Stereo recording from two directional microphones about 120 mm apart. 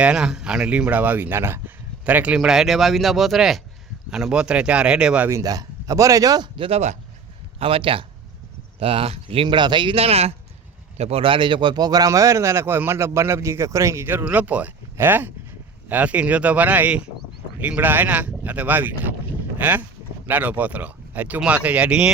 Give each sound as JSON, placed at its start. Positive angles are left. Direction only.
{"t": 0.0, "sound": "speech", "side_deg": -5}
{"t": 5.3, "sound": "speech", "side_deg": -30}
{"t": 6.6, "sound": "speech", "side_deg": -60}